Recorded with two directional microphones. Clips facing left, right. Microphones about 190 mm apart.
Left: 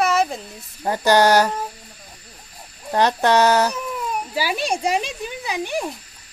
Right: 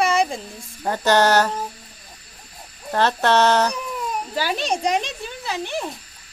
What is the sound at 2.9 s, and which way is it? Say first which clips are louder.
Speech: left 1 dB; 15° left (ahead or behind).